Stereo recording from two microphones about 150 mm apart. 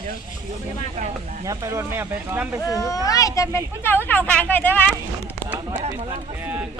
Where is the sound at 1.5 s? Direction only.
20° right (ahead or behind).